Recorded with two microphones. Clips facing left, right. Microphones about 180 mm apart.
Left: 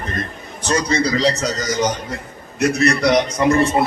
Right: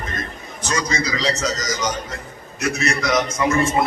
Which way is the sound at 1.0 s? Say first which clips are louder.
Left 6 dB; 60° left (ahead or behind).